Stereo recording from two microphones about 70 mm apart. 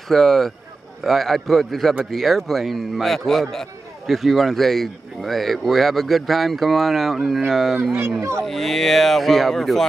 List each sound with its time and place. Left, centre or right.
0.1 s speech: centre
8.2 s speech: right
8.5 s speech: centre